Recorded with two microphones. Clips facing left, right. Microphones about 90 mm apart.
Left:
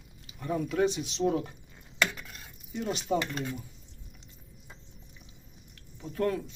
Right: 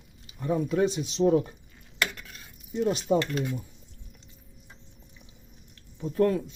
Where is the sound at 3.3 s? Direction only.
15° right (ahead or behind).